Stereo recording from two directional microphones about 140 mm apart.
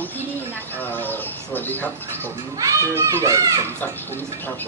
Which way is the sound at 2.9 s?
20° right (ahead or behind).